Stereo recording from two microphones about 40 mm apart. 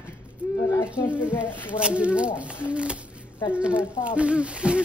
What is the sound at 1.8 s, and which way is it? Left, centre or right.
Speech, right.